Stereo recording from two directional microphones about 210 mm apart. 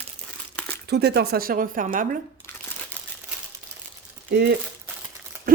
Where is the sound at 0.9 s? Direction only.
50° right (ahead or behind).